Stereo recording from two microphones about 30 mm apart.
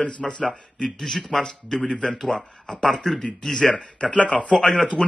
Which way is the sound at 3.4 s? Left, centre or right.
Left.